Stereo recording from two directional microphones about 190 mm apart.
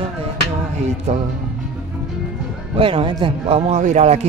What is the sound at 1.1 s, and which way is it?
Speech, 40° right (ahead or behind).